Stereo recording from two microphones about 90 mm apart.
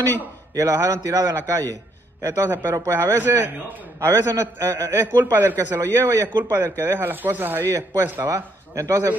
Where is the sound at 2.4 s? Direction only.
25° right (ahead or behind).